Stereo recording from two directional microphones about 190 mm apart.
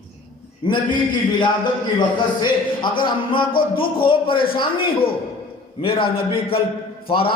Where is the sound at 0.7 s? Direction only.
25° left (ahead or behind).